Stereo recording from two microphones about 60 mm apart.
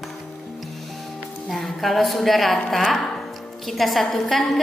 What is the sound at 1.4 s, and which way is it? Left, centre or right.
A woman's voice, centre.